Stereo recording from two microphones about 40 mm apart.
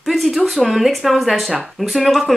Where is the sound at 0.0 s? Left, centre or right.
Centre.